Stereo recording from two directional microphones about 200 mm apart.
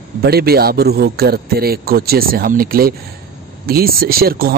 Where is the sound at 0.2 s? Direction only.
50° right (ahead or behind).